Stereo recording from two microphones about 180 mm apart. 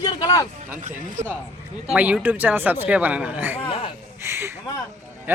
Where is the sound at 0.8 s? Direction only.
40° right (ahead or behind).